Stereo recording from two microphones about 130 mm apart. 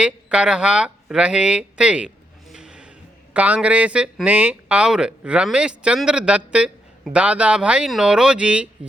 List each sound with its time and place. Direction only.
0.0 s speech: 5° right (ahead or behind)
2.5 s a sound: 5° right (ahead or behind)
3.3 s speech: 10° right (ahead or behind)